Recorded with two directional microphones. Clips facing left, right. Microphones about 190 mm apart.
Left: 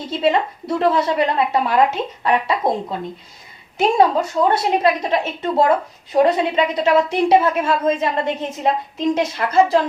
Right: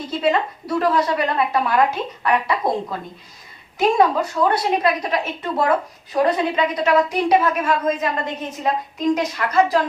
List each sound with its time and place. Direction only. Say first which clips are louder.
0.2 s a woman's voice: left 2 dB; 25° left (ahead or behind)